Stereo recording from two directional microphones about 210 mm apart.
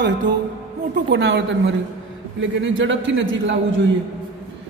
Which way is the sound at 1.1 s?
60° right (ahead or behind).